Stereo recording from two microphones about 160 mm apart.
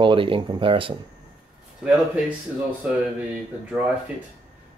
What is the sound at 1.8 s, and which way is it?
Speech, 5° right (ahead or behind).